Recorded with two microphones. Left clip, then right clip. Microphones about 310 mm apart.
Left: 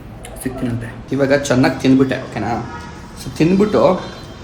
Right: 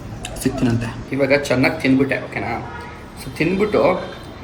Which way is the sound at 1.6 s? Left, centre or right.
Centre.